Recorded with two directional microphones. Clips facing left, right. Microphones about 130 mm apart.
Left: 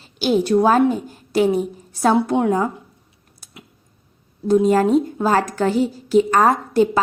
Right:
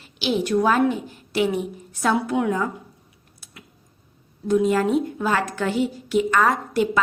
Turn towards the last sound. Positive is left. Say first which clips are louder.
# left 5 dB
turn(degrees=35)  # may be behind; listen again after turning